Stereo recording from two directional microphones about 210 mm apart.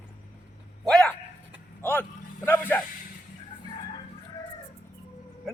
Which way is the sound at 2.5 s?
10° left (ahead or behind).